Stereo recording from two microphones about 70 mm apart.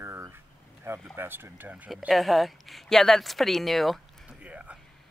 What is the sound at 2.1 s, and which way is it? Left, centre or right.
Speech, centre.